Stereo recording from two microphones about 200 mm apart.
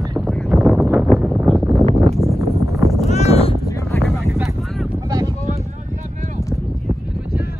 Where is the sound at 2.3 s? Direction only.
15° right (ahead or behind).